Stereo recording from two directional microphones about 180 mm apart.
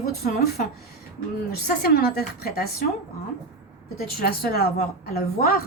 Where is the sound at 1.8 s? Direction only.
60° left (ahead or behind).